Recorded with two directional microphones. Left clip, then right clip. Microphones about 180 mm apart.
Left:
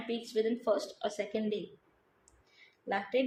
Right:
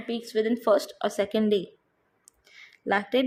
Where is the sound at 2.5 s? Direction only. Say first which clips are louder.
Right 9 dB; 50° right (ahead or behind).